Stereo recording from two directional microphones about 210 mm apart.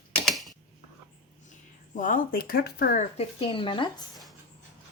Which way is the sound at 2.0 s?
40° left (ahead or behind).